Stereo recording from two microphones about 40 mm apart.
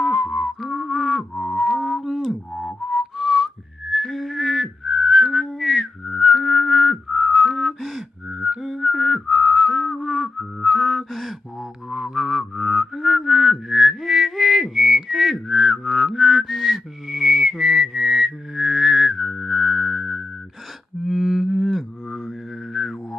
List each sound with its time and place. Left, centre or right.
0.0 s music: centre
1.8 s whistling: centre
4.8 s whistling: centre
5.5 s music: centre
8.3 s a sound: centre
8.5 s whistling: centre
11.9 s music: centre
21.0 s a sound: centre
21.7 s didgeridoo: centre